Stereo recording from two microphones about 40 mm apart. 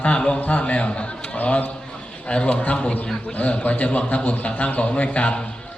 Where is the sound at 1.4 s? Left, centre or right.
Left.